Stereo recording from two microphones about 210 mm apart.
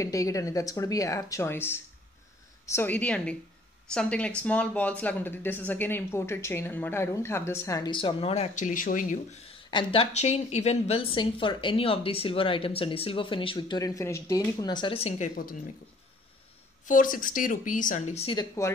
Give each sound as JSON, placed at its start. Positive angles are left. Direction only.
{"t": 0.0, "sound": "a woman's voice", "side_deg": 15}
{"t": 9.7, "sound": "a woman's voice", "side_deg": 25}
{"t": 16.8, "sound": "speech", "side_deg": 40}